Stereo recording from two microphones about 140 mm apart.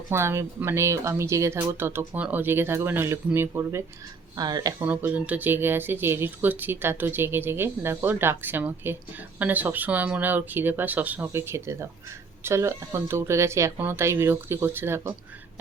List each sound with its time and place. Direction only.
0.1 s speech: 20° right (ahead or behind)
4.8 s speech: 15° right (ahead or behind)